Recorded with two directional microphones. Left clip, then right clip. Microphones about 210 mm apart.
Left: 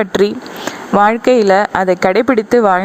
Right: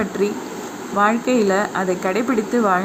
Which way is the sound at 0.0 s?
35° left (ahead or behind).